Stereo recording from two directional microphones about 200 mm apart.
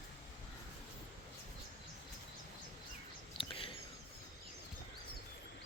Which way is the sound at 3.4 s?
25° left (ahead or behind).